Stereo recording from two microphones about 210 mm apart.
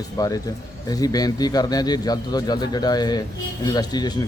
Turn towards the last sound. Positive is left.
turn(degrees=20)  # may be behind; listen again after turning